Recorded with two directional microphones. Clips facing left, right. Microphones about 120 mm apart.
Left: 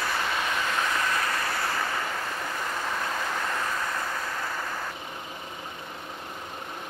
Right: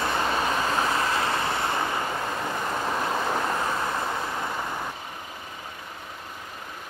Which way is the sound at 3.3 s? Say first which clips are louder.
Right 4 dB; 25° right (ahead or behind).